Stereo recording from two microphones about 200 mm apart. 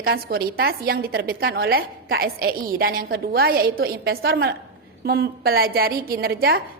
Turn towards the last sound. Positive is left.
turn(degrees=-50)  # may be behind; listen again after turning